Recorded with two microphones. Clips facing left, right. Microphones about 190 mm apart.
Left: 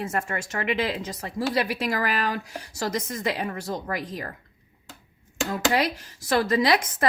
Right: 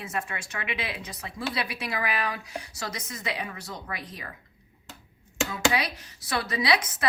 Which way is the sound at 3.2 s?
50° left (ahead or behind).